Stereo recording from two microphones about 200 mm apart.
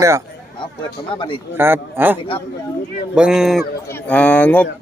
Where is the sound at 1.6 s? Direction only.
10° right (ahead or behind); by 4.6 s 10° left (ahead or behind).